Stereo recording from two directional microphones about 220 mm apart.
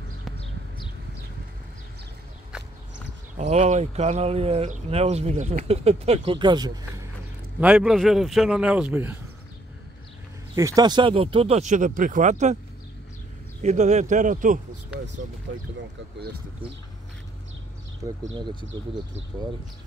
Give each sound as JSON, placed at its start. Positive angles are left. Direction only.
{"t": 3.3, "sound": "speech", "side_deg": -30}
{"t": 7.6, "sound": "a man's voice", "side_deg": -5}
{"t": 10.5, "sound": "speech", "side_deg": -15}
{"t": 13.6, "sound": "speech", "side_deg": -30}
{"t": 18.3, "sound": "speech", "side_deg": -20}